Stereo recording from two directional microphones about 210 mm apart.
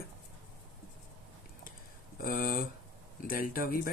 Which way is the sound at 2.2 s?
45° left (ahead or behind).